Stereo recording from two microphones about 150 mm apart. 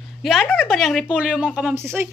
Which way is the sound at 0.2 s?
Centre (ahead or behind).